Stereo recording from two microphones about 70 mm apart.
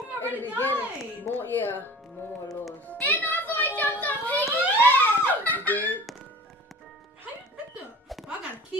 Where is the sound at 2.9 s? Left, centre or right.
Left.